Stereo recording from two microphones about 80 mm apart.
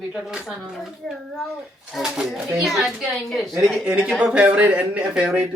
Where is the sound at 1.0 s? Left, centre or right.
Centre.